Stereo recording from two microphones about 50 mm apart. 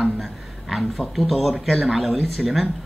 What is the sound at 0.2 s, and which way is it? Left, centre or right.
Speech, centre.